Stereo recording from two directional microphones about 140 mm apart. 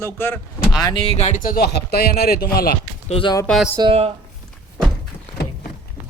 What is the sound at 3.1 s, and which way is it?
Speech, 40° left (ahead or behind).